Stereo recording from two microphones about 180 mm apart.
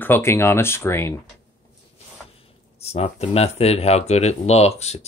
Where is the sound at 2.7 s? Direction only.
35° left (ahead or behind).